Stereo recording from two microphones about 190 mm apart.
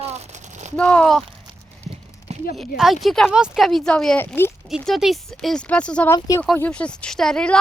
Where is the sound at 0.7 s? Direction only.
5° left (ahead or behind).